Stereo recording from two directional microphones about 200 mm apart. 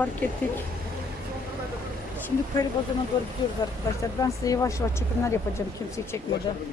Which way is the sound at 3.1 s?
20° left (ahead or behind).